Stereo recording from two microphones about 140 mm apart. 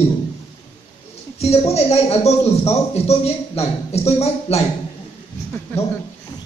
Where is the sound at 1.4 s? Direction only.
50° left (ahead or behind).